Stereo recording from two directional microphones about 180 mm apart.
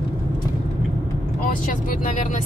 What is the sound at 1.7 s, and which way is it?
Speech, 45° left (ahead or behind).